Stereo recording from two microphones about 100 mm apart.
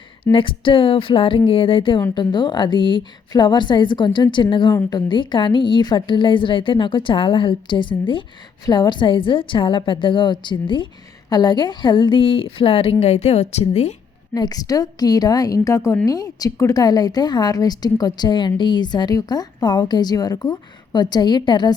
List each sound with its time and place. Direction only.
0.3 s a woman's voice: 60° left (ahead or behind)
2.1 s a woman's voice: 50° left (ahead or behind); by 13.9 s 90° left
14.3 s a woman's voice: 40° left (ahead or behind)